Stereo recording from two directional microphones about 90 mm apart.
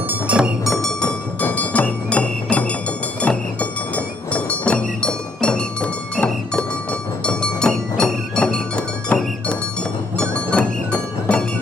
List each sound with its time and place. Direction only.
0.3 s music: 15° right (ahead or behind)
0.7 s music: 5° left (ahead or behind)
1.4 s music: 15° left (ahead or behind)